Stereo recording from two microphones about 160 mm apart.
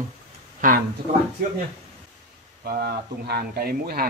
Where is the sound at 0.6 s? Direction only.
55° right (ahead or behind).